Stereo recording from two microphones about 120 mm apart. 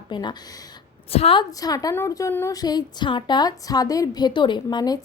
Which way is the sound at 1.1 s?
55° left (ahead or behind).